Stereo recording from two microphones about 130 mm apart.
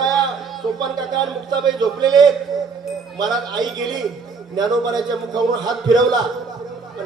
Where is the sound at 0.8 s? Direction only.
35° right (ahead or behind).